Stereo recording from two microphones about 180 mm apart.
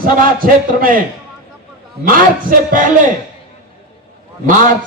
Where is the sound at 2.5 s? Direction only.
50° right (ahead or behind).